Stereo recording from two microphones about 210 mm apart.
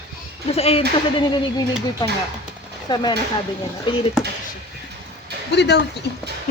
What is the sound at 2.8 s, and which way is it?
Speech, 20° left (ahead or behind).